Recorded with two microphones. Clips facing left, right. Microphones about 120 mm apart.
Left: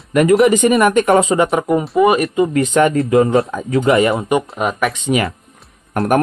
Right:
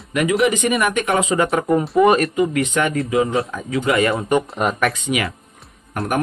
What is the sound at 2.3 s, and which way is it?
Speech, 25° left (ahead or behind).